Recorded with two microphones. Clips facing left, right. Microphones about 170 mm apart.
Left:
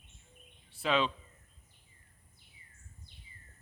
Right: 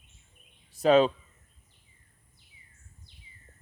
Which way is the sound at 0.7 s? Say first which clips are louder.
Right 10 dB; 40° right (ahead or behind).